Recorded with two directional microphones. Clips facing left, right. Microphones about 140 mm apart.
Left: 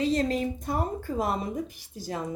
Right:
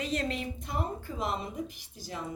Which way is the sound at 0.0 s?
35° left (ahead or behind).